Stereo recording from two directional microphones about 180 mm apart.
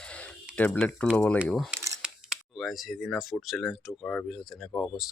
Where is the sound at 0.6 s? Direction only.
5° left (ahead or behind).